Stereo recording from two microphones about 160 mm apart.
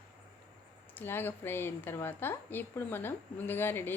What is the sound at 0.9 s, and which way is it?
Speech, 15° left (ahead or behind).